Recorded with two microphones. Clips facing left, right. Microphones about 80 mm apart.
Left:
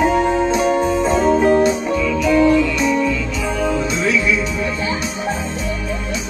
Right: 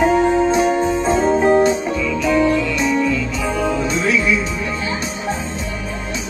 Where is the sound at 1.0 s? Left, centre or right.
Right.